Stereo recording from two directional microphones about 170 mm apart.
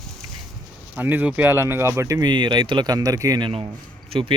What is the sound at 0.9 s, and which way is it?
Speech, 10° right (ahead or behind).